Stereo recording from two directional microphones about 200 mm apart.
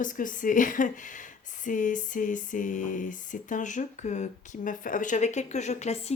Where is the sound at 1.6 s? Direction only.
40° left (ahead or behind).